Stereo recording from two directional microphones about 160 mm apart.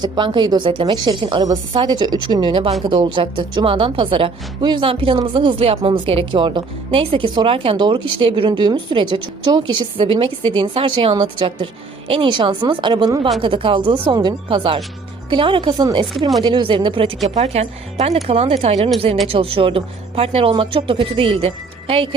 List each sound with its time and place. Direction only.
0.0 s a woman's voice: 30° right (ahead or behind)
17.2 s a woman's voice: 45° right (ahead or behind)